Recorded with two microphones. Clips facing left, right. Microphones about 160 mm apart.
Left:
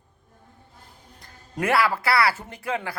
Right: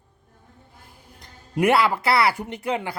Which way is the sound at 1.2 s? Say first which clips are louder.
Right 6 dB; 20° right (ahead or behind).